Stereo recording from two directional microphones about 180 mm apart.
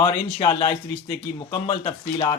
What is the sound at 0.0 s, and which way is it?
Speech, 25° left (ahead or behind).